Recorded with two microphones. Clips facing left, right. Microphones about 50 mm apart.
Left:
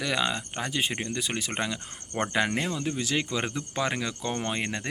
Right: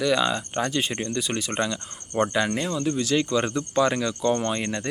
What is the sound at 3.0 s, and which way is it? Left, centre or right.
Speech, left.